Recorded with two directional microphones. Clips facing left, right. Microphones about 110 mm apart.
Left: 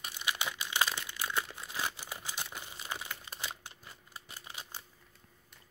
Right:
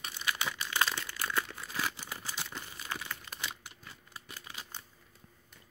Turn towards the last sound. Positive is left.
turn(degrees=20)  # may be behind; listen again after turning